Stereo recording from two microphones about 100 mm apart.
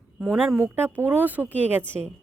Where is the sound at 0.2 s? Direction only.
5° right (ahead or behind).